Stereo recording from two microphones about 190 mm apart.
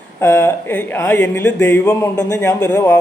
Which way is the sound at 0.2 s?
10° left (ahead or behind).